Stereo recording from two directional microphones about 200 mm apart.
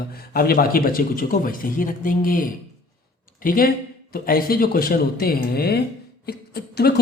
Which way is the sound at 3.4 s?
45° left (ahead or behind).